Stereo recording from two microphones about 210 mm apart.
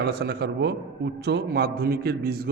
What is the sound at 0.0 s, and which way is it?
A man's voice, 50° right (ahead or behind).